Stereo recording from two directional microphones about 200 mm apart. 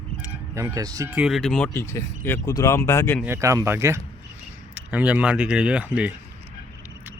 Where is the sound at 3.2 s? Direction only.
15° right (ahead or behind).